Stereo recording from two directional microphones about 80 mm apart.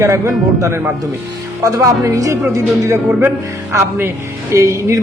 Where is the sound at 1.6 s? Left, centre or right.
Right.